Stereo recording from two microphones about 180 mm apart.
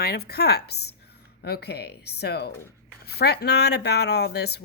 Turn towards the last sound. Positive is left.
turn(degrees=65)  # may be behind; listen again after turning